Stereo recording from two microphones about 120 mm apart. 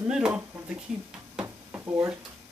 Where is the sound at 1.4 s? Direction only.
20° right (ahead or behind).